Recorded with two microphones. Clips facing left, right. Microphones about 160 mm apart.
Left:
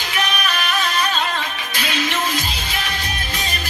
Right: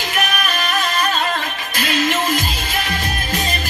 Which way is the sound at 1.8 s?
50° right (ahead or behind).